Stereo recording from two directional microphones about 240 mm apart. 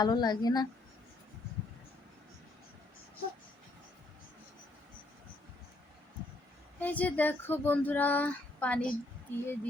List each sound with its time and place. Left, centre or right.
0.0 s speech: centre
6.7 s speech: centre